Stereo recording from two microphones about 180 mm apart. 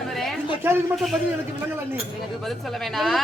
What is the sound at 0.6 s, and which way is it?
Speech, 10° right (ahead or behind).